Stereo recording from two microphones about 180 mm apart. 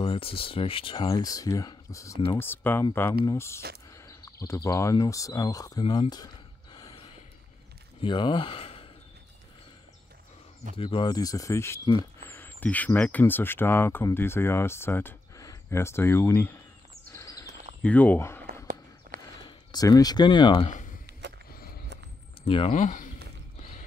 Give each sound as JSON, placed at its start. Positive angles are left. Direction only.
{"t": 0.0, "sound": "speech", "side_deg": 30}
{"t": 6.7, "sound": "gasp", "side_deg": 20}
{"t": 8.0, "sound": "speech", "side_deg": 25}
{"t": 10.8, "sound": "speech", "side_deg": 30}
{"t": 17.1, "sound": "squeal", "side_deg": 15}
{"t": 17.8, "sound": "speech", "side_deg": 10}
{"t": 18.7, "sound": "walk", "side_deg": -55}
{"t": 19.4, "sound": "speech", "side_deg": 20}
{"t": 20.6, "sound": "a sound", "side_deg": 45}
{"t": 21.2, "sound": "a sound", "side_deg": -75}
{"t": 22.4, "sound": "speech", "side_deg": 30}